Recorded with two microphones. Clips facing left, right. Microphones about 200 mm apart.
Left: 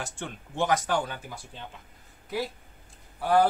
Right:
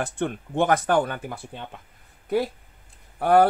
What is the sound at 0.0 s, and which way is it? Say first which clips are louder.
Speech: right 10 dB; 55° right (ahead or behind).